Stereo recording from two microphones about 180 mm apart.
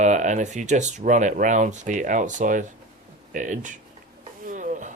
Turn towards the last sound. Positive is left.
turn(degrees=-45)  # may be behind; listen again after turning